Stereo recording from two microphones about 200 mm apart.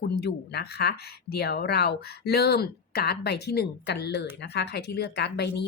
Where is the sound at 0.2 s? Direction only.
55° left (ahead or behind).